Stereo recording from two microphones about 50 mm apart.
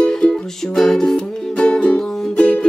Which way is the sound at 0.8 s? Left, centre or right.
Centre.